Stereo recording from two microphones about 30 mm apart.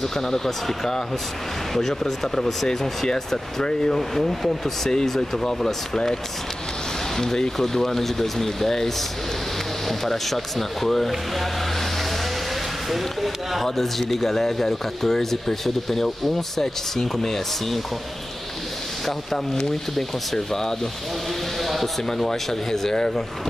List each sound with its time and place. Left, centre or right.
1.7 s speech: centre
7.2 s speech: centre
12.9 s speech: centre
19.0 s speech: centre
22.2 s speech: centre